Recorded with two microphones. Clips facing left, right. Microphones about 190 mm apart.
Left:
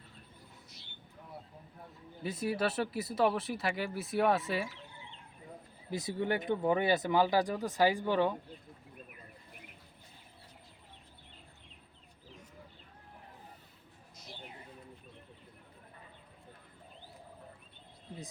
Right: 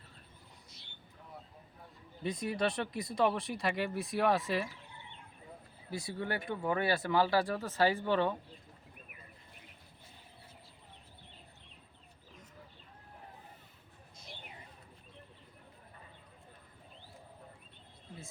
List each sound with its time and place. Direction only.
2.2 s speech: 5° left (ahead or behind)
5.9 s speech: 20° left (ahead or behind)